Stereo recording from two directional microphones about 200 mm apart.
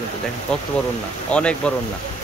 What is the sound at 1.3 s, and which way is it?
Speech, 5° left (ahead or behind).